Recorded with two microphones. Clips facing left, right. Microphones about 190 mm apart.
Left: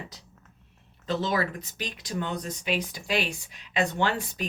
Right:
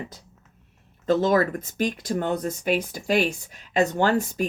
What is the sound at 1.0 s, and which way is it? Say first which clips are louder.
Speech: right 8 dB; 50° right (ahead or behind).